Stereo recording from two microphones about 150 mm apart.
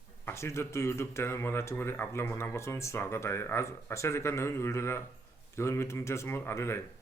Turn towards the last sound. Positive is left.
turn(degrees=15)  # may be behind; listen again after turning